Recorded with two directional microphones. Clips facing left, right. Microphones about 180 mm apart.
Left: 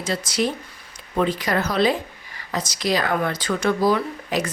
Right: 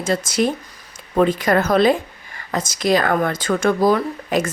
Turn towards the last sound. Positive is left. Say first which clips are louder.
# right 4 dB
turn(degrees=-50)  # may be behind; listen again after turning